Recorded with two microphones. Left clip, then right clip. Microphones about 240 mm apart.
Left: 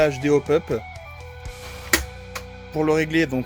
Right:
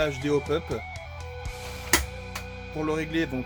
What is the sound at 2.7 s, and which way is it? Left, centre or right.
Speech, left.